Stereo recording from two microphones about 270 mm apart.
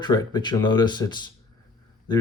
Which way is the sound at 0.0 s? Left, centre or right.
Centre.